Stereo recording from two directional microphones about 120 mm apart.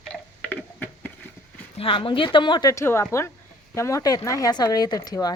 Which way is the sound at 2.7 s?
20° left (ahead or behind).